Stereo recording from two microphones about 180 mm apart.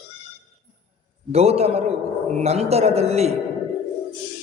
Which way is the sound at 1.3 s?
35° right (ahead or behind).